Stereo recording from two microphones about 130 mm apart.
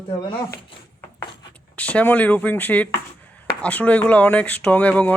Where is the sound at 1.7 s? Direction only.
10° left (ahead or behind).